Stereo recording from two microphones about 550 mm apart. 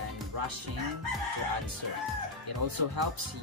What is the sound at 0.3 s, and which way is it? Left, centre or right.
Music, right.